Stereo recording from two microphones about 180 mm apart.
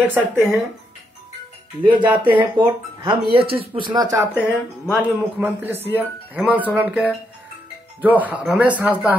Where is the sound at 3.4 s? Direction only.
30° right (ahead or behind).